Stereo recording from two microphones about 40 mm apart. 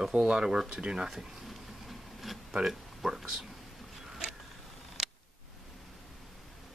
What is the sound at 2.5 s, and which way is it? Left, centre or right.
Speech, centre.